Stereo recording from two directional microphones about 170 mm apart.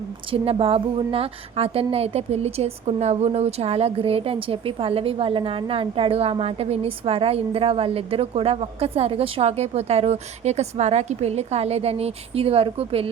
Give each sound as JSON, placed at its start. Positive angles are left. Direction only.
{"t": 0.3, "sound": "a woman's voice", "side_deg": -35}